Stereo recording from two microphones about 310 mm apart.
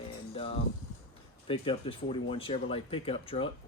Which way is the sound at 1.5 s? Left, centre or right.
Centre.